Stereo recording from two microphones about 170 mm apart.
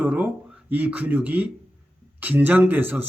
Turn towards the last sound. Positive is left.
turn(degrees=-10)  # may be behind; listen again after turning